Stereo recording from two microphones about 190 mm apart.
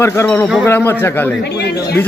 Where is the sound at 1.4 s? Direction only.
60° left (ahead or behind).